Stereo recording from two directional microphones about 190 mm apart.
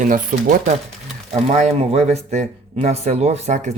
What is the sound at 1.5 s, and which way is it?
Speech, 35° right (ahead or behind).